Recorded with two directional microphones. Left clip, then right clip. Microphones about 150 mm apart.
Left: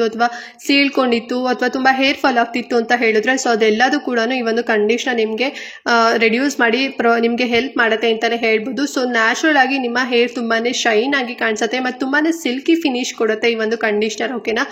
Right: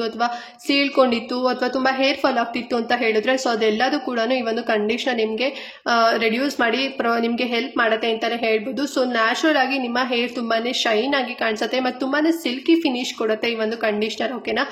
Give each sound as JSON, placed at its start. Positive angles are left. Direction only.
{"t": 0.0, "sound": "speech", "side_deg": 20}